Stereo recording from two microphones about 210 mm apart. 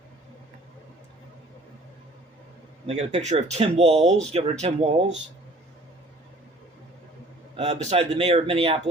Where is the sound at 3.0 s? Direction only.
30° right (ahead or behind).